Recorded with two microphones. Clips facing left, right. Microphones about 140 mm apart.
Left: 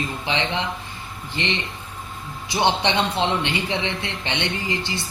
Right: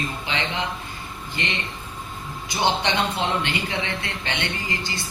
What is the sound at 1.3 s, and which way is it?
Speech, 25° left (ahead or behind).